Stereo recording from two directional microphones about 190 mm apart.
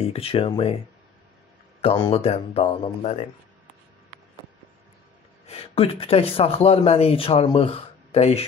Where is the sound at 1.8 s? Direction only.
30° left (ahead or behind).